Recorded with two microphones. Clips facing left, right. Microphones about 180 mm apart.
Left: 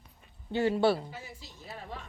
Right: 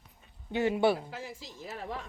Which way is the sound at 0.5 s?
20° right (ahead or behind).